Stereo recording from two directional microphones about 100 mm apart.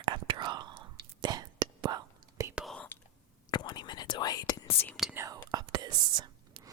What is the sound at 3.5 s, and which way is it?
Whispering, 45° left (ahead or behind).